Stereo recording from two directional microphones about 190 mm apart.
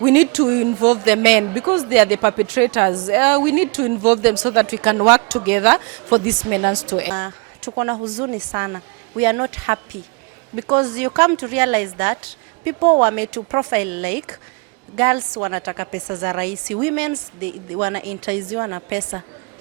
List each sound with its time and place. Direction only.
0.0 s speech: 10° right (ahead or behind)